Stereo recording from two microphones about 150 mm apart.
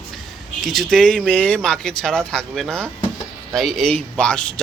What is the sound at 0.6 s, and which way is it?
Speech, centre (ahead or behind).